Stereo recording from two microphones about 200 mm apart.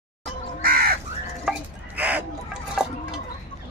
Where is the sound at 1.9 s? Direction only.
10° right (ahead or behind).